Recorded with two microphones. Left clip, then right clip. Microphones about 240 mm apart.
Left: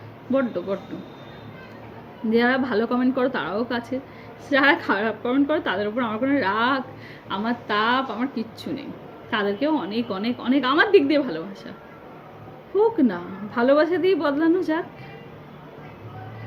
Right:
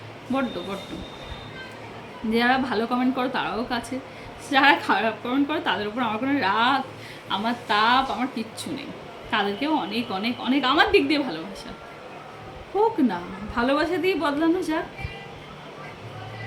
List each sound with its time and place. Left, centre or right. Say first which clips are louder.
2.3 s speech: left 1 dB; centre
13.1 s speech: left 1 dB; centre